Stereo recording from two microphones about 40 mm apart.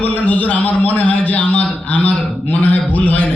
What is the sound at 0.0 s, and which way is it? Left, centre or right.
A man's voice, left.